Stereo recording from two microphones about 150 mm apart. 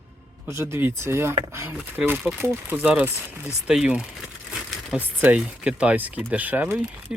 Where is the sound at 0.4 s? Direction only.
20° right (ahead or behind).